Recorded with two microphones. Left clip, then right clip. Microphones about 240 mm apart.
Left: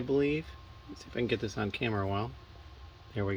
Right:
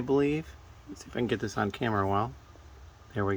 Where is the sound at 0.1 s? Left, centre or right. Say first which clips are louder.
Right 3 dB; right.